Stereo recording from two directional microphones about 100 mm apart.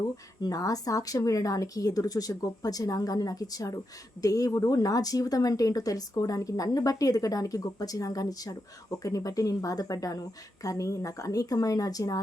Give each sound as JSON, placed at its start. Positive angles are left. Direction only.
{"t": 0.4, "sound": "speech", "side_deg": 35}